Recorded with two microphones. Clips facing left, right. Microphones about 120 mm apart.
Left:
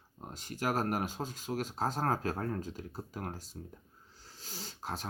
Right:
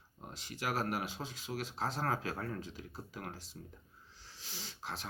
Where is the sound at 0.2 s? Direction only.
45° left (ahead or behind).